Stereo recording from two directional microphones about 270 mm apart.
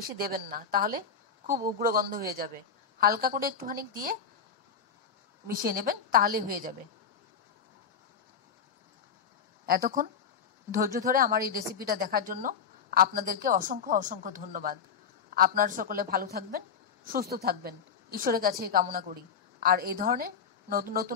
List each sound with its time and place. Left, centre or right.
0.0 s a woman's voice: right
5.5 s a woman's voice: right
9.7 s a woman's voice: right